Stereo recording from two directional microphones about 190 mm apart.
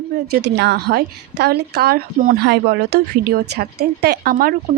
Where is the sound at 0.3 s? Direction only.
60° right (ahead or behind).